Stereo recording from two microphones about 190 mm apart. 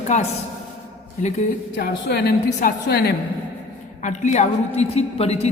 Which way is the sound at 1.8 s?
60° left (ahead or behind).